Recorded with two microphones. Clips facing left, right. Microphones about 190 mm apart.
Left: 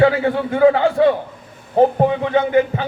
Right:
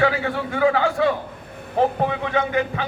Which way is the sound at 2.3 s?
30° left (ahead or behind).